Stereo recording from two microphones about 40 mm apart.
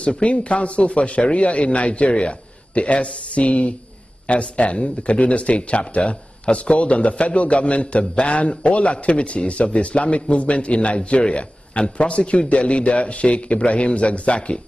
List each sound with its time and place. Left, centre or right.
0.0 s a man's voice: left